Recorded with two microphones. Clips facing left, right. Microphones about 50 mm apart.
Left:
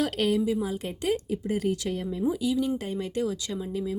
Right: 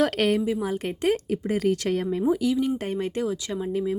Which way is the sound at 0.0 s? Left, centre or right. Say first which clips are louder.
Right 3 dB; right.